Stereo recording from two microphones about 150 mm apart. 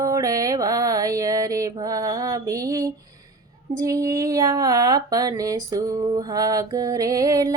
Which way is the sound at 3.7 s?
20° right (ahead or behind).